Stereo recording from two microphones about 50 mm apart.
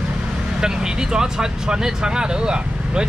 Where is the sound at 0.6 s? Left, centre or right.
Centre.